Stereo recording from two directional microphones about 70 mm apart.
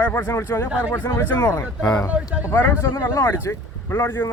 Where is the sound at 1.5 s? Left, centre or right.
Left.